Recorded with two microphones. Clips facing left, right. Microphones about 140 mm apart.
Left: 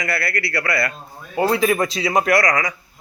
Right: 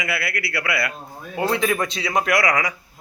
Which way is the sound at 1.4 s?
5° left (ahead or behind).